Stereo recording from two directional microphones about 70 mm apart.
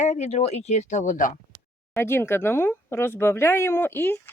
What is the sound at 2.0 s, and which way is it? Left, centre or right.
Speech, left.